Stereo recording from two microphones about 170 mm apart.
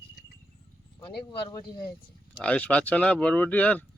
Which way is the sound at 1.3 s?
25° left (ahead or behind).